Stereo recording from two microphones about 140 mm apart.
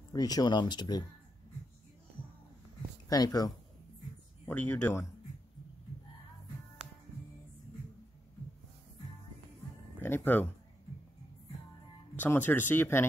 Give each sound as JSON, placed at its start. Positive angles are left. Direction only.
{"t": 0.1, "sound": "speech", "side_deg": 25}
{"t": 3.1, "sound": "speech", "side_deg": 25}
{"t": 4.5, "sound": "speech", "side_deg": 15}
{"t": 10.0, "sound": "speech", "side_deg": 15}
{"t": 12.2, "sound": "speech", "side_deg": 15}